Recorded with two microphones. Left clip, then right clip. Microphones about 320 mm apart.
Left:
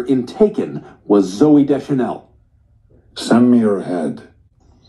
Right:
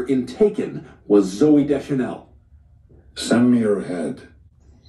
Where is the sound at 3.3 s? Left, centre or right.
Centre.